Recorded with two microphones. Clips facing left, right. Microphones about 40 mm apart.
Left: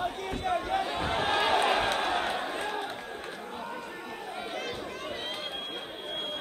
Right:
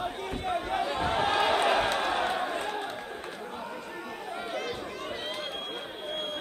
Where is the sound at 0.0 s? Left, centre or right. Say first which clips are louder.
Left 1 dB; centre.